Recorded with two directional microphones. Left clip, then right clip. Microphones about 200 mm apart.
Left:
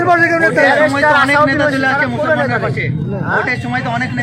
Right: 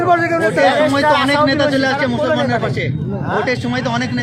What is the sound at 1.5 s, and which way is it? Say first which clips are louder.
Speech: left 2 dB; 60° right (ahead or behind).